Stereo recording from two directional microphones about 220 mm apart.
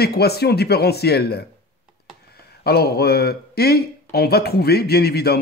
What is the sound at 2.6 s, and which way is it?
Speech, 45° left (ahead or behind).